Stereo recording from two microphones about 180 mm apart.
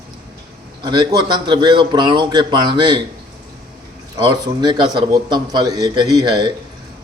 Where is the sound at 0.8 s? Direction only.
25° right (ahead or behind).